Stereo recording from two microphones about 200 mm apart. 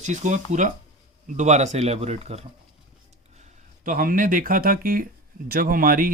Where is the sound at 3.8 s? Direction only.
45° right (ahead or behind).